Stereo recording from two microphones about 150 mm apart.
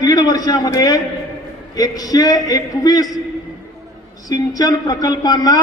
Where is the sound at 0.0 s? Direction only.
25° left (ahead or behind).